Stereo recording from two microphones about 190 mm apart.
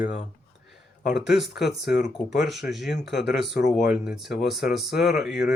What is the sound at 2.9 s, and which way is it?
Speech, 65° left (ahead or behind).